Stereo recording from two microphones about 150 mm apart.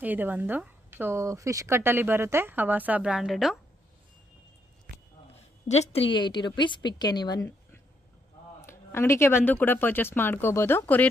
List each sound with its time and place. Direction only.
0.0 s a woman's voice: 10° right (ahead or behind)
5.3 s a woman's voice: 45° left (ahead or behind); by 7.4 s 30° left (ahead or behind)
8.5 s speech: 15° left (ahead or behind)